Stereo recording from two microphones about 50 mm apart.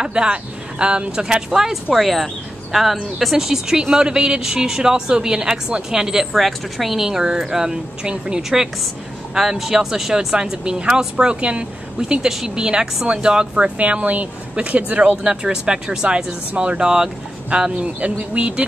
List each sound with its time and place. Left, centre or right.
0.0 s speech: centre
1.7 s speech: centre
6.3 s speech: centre
13.8 s speech: right